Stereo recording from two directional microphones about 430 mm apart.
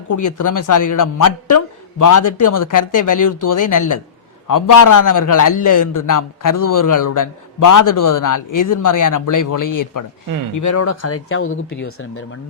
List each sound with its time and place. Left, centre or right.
0.1 s a man's voice: left